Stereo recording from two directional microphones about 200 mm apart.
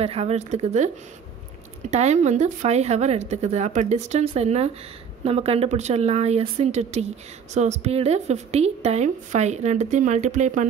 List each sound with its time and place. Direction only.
0.0 s a woman's voice: 30° right (ahead or behind)